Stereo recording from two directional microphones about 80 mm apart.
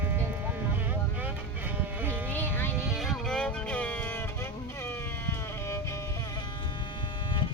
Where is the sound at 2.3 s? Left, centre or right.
Left.